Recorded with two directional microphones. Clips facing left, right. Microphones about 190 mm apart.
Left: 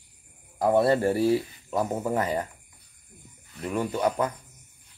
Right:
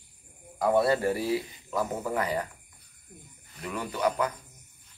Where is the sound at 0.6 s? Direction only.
30° left (ahead or behind).